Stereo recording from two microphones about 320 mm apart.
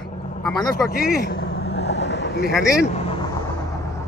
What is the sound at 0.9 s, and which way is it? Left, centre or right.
Vehicle, left.